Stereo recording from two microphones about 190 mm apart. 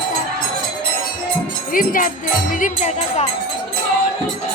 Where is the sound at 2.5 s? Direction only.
45° left (ahead or behind).